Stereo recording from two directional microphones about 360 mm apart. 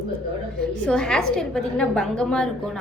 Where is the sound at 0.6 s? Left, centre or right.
Centre.